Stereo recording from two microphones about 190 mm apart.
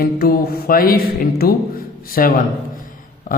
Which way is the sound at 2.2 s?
50° left (ahead or behind).